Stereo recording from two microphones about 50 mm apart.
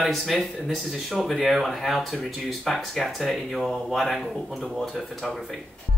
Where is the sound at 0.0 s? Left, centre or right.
Centre.